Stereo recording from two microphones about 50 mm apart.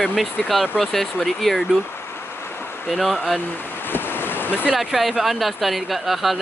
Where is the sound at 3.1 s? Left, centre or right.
Centre.